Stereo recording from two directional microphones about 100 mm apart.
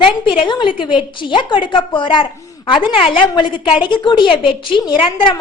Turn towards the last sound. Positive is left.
turn(degrees=55)  # may be behind; listen again after turning